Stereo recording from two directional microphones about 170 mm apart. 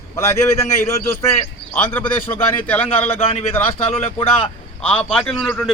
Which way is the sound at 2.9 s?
35° left (ahead or behind).